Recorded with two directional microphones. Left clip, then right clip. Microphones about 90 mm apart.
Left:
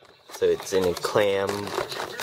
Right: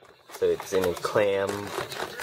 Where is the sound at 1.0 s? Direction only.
35° left (ahead or behind).